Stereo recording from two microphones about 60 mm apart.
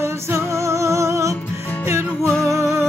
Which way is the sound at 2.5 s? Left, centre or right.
Right.